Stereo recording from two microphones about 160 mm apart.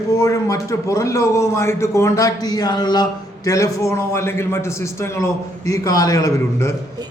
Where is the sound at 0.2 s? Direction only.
20° left (ahead or behind).